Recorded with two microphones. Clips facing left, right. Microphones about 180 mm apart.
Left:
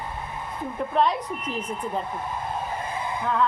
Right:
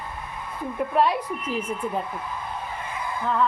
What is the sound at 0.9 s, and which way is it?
Speech, 10° right (ahead or behind).